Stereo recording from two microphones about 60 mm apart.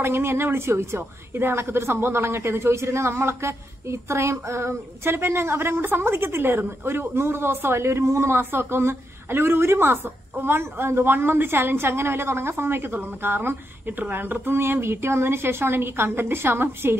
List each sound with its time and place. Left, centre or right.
0.0 s a woman's voice: right